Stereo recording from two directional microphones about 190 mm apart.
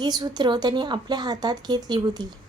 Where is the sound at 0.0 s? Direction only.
20° right (ahead or behind).